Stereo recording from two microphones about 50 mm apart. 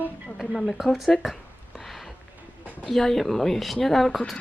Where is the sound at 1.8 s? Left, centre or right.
Centre.